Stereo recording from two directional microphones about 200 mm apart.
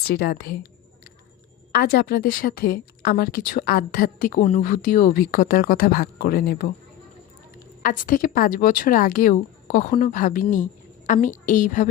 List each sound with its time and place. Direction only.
0.1 s speech: 50° left (ahead or behind)
1.8 s speech: 50° left (ahead or behind)
7.8 s a woman's voice: 40° left (ahead or behind)